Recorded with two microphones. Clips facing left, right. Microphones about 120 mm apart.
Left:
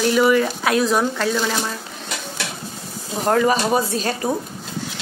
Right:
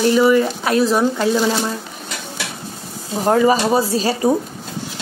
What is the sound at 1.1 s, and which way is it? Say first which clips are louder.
Music: right 4 dB; 15° right (ahead or behind).